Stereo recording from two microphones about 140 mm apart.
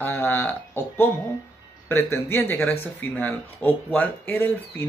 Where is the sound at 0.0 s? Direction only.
15° left (ahead or behind).